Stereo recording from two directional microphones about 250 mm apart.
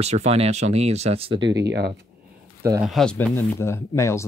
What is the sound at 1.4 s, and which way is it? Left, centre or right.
Speech, right.